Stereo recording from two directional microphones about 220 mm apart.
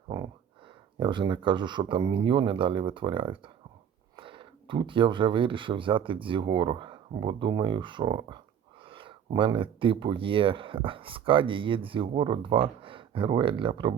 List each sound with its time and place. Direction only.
0.9 s speech: 20° right (ahead or behind)